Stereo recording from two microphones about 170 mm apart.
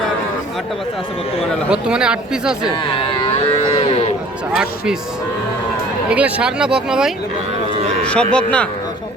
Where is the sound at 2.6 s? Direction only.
30° left (ahead or behind).